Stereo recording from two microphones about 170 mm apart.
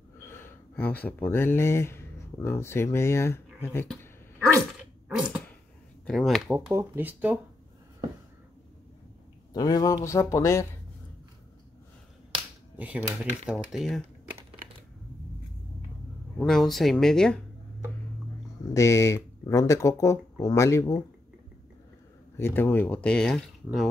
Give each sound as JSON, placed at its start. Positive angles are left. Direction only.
{"t": 0.3, "sound": "speech", "side_deg": 10}
{"t": 4.0, "sound": "dog", "side_deg": 10}
{"t": 5.0, "sound": "a sound", "side_deg": -5}
{"t": 6.0, "sound": "speech", "side_deg": 0}
{"t": 6.5, "sound": "speech", "side_deg": -15}
{"t": 9.5, "sound": "speech", "side_deg": 20}
{"t": 12.7, "sound": "speech", "side_deg": -10}
{"t": 16.3, "sound": "speech", "side_deg": 0}
{"t": 18.7, "sound": "speech", "side_deg": 15}
{"t": 22.4, "sound": "speech", "side_deg": 10}